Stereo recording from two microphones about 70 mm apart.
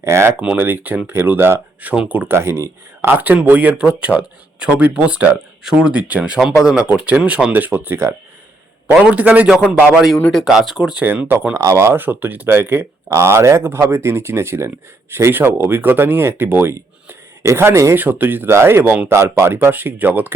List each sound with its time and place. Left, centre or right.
0.0 s speech: right
0.5 s speech: right
2.0 s speech: right
2.3 s speech: right
3.1 s speech: right
9.0 s speech: centre
11.0 s speech: right
11.5 s speech: right
11.9 s speech: right
13.1 s speech: right
17.1 s a sound: right
17.9 s speech: right
19.5 s speech: right